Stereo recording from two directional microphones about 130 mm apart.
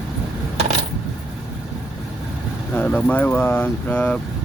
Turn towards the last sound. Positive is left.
turn(degrees=10)  # may be behind; listen again after turning